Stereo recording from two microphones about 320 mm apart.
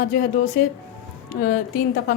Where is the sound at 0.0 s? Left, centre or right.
Left.